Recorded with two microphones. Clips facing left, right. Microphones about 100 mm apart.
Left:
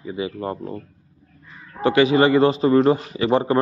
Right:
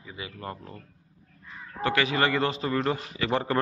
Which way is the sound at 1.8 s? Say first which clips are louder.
Left 9 dB; 20° left (ahead or behind).